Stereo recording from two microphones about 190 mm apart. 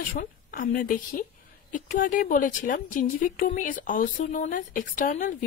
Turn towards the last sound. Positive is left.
turn(degrees=45)  # may be behind; listen again after turning